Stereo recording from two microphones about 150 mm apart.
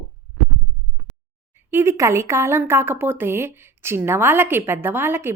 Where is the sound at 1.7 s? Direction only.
20° right (ahead or behind).